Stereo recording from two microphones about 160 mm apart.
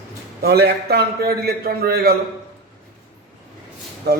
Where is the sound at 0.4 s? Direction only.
85° right.